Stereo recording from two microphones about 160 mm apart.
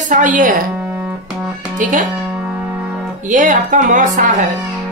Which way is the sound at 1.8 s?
55° right (ahead or behind).